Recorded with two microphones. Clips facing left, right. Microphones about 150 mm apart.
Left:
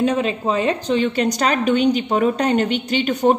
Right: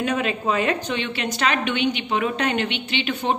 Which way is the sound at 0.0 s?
30° left (ahead or behind).